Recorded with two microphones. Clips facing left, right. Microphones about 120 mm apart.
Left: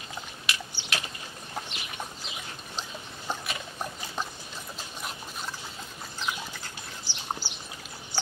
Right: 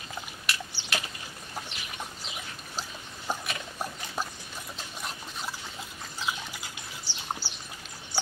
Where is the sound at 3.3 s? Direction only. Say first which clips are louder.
Right 1 dB; 10° right (ahead or behind).